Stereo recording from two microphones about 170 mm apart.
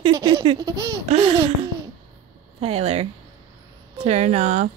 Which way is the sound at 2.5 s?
35° right (ahead or behind).